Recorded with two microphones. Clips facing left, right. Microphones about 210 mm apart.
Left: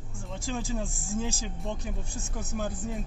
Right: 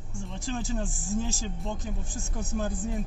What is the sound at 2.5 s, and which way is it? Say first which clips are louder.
Speech: right 2 dB; centre (ahead or behind).